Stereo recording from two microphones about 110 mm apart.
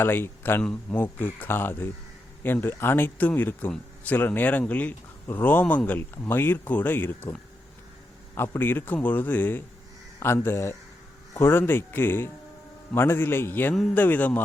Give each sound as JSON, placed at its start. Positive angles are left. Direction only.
{"t": 0.0, "sound": "speech", "side_deg": 20}
{"t": 8.4, "sound": "speech", "side_deg": 20}